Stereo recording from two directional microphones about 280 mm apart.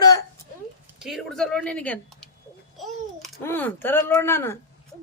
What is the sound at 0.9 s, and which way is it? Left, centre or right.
A child's voice, centre.